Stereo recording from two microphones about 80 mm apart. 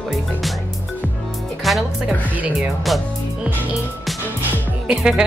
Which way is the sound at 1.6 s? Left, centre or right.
Centre.